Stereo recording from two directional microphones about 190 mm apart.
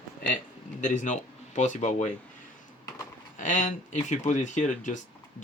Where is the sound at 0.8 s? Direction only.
40° left (ahead or behind).